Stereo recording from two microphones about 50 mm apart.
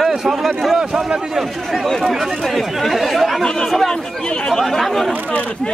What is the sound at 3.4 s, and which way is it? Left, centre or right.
Speech, centre.